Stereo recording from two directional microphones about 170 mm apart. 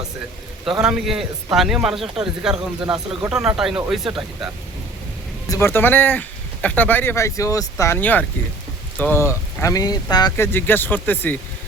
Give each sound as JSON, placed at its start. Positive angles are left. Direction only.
{"t": 0.8, "sound": "speech", "side_deg": -5}
{"t": 5.5, "sound": "speech", "side_deg": 15}
{"t": 10.4, "sound": "speech", "side_deg": 10}